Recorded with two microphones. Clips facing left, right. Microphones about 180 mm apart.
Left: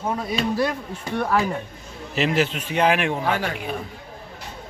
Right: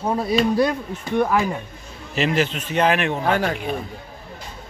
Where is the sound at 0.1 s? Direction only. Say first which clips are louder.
Right 6 dB; 30° right (ahead or behind).